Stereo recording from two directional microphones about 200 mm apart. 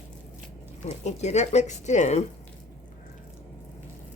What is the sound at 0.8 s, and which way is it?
Speech, 35° left (ahead or behind).